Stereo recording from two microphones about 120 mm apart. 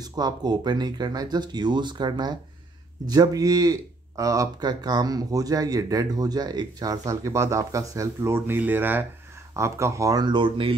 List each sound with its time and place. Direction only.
0.0 s speech: 35° right (ahead or behind)